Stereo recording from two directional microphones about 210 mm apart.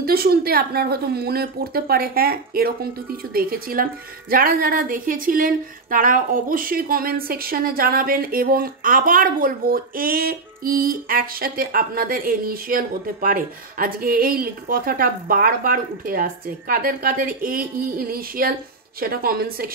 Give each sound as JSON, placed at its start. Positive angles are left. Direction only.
{"t": 0.0, "sound": "a woman's voice", "side_deg": -45}